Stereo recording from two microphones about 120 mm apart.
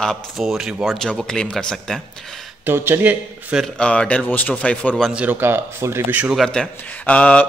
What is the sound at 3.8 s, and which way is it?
A man's voice, 10° left (ahead or behind).